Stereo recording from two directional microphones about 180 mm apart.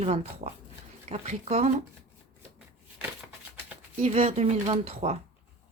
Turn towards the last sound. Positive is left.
turn(degrees=-35)  # may be behind; listen again after turning